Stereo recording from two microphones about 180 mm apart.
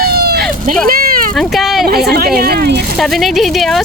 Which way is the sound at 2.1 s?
55° right (ahead or behind).